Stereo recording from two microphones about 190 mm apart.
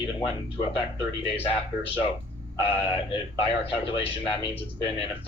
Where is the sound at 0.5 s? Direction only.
30° left (ahead or behind).